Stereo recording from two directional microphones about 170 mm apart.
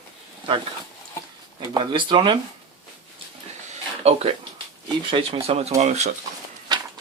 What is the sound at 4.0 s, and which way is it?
Speech, 35° right (ahead or behind).